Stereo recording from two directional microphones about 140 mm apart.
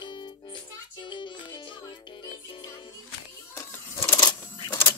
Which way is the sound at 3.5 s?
20° left (ahead or behind).